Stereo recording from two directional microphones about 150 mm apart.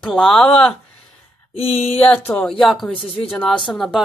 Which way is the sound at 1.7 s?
45° left (ahead or behind).